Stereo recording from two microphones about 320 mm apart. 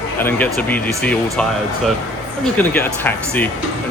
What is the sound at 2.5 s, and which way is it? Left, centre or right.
Speech, centre.